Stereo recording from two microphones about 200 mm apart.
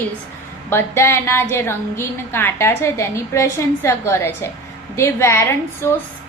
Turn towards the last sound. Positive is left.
turn(degrees=10)  # may be behind; listen again after turning